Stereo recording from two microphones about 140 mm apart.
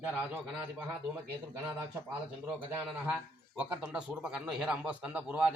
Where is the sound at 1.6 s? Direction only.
15° right (ahead or behind).